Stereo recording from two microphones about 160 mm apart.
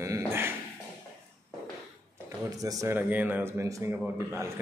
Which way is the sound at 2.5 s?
20° right (ahead or behind).